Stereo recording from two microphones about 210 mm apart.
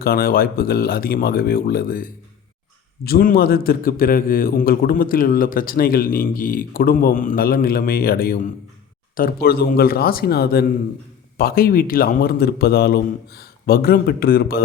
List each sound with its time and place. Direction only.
0.0 s a man's voice: 45° left (ahead or behind)